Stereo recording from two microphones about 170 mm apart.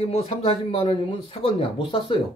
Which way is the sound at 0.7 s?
30° left (ahead or behind).